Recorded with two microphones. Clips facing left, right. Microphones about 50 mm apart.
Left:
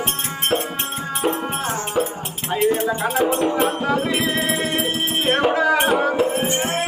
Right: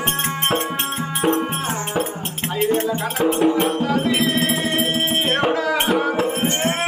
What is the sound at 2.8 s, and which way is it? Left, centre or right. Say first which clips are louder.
Speech: left 1 dB; left.